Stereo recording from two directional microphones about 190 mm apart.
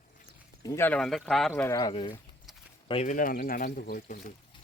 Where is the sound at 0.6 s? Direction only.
15° left (ahead or behind).